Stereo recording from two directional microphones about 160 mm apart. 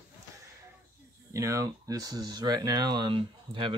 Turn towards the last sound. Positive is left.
turn(degrees=-30)  # may be behind; listen again after turning